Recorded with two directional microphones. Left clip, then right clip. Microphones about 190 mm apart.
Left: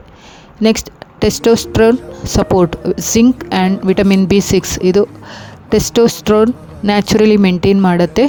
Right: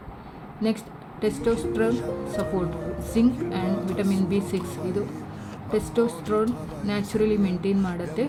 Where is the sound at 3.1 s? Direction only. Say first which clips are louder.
Left 11 dB; 60° left (ahead or behind).